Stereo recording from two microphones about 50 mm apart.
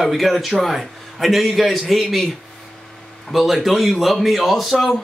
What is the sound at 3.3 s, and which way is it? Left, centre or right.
Speech, centre.